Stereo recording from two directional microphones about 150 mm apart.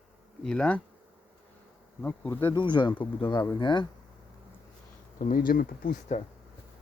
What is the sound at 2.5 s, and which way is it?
Speech, 30° left (ahead or behind).